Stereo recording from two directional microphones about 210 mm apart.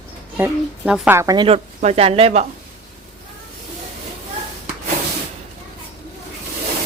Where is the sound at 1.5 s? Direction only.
30° right (ahead or behind).